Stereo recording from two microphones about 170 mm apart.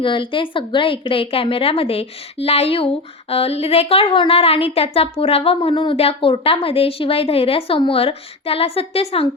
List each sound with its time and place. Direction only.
0.0 s a woman's voice: 30° left (ahead or behind)